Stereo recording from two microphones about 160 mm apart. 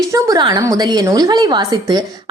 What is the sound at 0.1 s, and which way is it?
A woman's voice, 25° right (ahead or behind).